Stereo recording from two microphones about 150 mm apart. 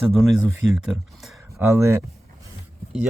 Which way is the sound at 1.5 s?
20° right (ahead or behind).